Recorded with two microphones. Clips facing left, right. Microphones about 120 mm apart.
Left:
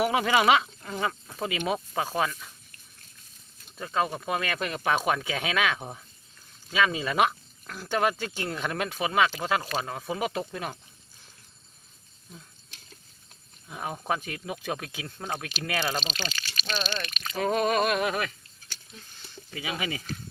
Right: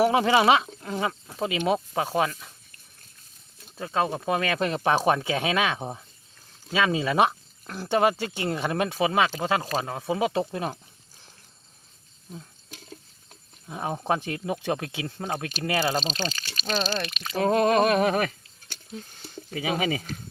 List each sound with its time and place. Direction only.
0.0 s speech: 25° right (ahead or behind)
3.8 s speech: 25° right (ahead or behind)
13.7 s speech: 25° right (ahead or behind)
15.8 s speech: 35° right (ahead or behind)
17.8 s speech: 40° right (ahead or behind)
19.2 s speech: 50° right (ahead or behind)